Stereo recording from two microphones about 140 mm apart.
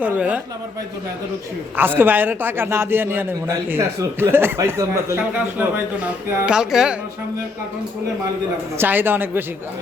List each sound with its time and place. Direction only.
0.0 s a man's voice: 10° right (ahead or behind)
1.7 s a man's voice: 15° right (ahead or behind)
6.2 s speech: 5° right (ahead or behind)
8.8 s a man's voice: 15° right (ahead or behind)